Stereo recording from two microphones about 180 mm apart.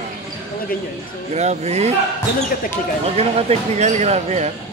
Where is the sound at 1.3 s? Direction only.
40° right (ahead or behind).